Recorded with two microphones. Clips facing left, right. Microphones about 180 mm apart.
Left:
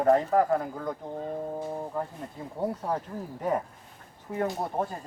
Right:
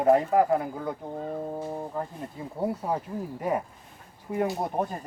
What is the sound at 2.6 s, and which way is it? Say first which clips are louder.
Speech: right 1 dB; 10° right (ahead or behind).